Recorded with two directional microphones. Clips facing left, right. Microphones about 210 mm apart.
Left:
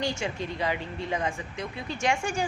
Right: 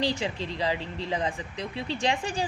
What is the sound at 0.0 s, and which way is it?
Speech, 30° right (ahead or behind).